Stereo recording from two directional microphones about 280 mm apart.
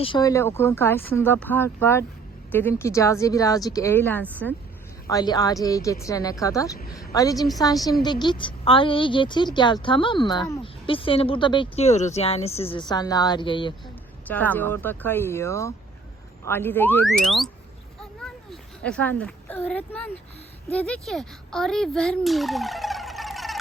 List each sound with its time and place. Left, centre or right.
0.0 s speech: centre
14.3 s speech: centre
18.2 s a sound: centre
18.8 s a child's voice: centre